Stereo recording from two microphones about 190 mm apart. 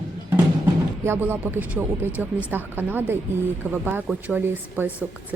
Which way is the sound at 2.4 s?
10° right (ahead or behind).